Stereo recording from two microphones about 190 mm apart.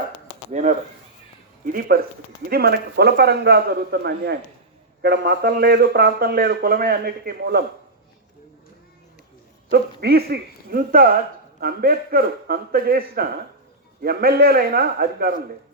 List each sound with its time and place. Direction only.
0.5 s a man's voice: 40° right (ahead or behind)
9.7 s speech: 55° right (ahead or behind)